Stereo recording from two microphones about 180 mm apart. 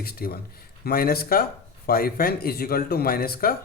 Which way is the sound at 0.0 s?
60° left (ahead or behind).